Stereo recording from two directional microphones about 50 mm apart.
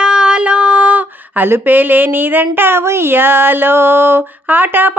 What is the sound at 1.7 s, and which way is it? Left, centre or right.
Speech, right.